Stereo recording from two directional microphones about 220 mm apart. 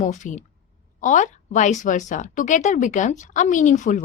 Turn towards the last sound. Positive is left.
turn(degrees=35)  # may be behind; listen again after turning